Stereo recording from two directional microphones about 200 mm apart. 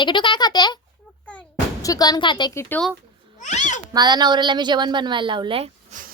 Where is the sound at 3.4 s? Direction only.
35° left (ahead or behind).